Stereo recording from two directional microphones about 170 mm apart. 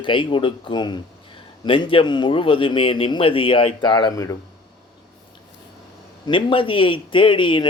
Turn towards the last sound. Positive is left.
turn(degrees=30)  # may be behind; listen again after turning